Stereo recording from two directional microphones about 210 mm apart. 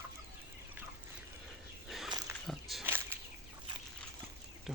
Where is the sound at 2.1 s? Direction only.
20° right (ahead or behind).